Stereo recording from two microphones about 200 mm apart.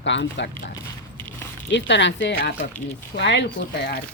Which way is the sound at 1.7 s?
65° left (ahead or behind).